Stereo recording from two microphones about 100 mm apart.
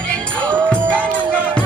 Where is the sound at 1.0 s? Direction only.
15° left (ahead or behind).